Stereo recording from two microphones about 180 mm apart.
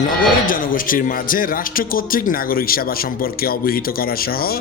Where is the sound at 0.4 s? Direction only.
50° left (ahead or behind).